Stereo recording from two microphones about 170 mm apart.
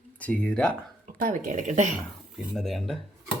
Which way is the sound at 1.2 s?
50° right (ahead or behind).